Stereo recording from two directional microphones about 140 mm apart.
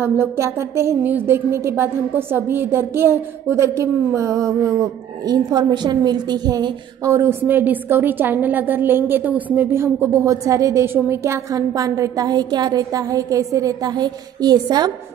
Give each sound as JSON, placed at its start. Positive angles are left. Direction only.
{"t": 0.0, "sound": "a woman's voice", "side_deg": -15}